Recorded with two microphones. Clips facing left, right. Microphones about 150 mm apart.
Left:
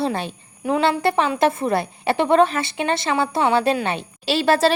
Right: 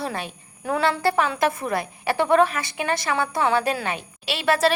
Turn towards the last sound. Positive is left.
turn(degrees=30)  # may be behind; listen again after turning